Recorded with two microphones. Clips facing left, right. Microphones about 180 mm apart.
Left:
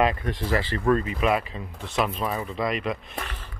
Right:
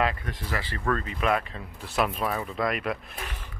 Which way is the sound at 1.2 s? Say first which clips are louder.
Left 2 dB; 5° left (ahead or behind).